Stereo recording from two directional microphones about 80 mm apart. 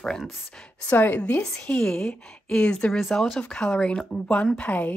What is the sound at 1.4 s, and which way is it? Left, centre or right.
Speech, centre.